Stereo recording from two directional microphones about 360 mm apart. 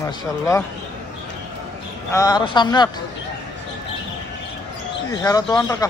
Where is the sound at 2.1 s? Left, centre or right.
Centre.